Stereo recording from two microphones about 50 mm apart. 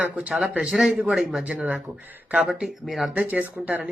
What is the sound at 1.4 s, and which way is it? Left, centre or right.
Speech, right.